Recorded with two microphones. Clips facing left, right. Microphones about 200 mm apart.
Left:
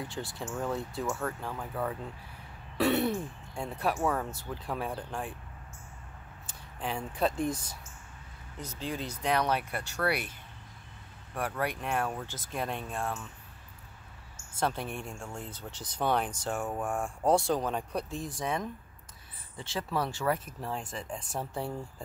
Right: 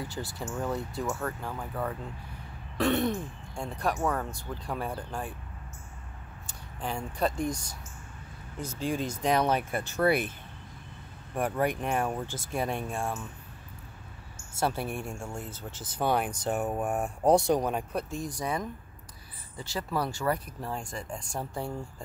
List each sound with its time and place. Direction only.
0.1 s speech: centre (ahead or behind)
6.4 s speech: centre (ahead or behind)
8.6 s speech: 10° right (ahead or behind)
11.3 s speech: 20° right (ahead or behind)
14.5 s speech: 10° right (ahead or behind)